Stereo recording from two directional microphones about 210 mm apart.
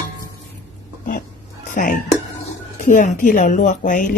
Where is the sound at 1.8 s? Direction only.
40° left (ahead or behind).